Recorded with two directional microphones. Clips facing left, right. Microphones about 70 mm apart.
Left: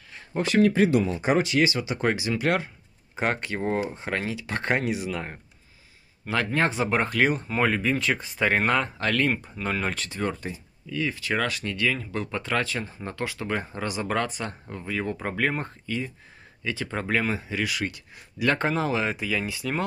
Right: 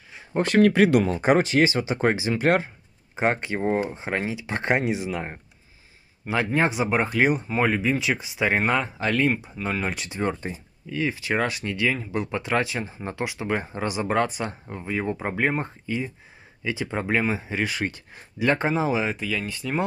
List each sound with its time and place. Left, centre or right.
0.4 s speech: right
3.2 s speech: right
10.4 s speech: right
18.5 s speech: centre
19.0 s speech: centre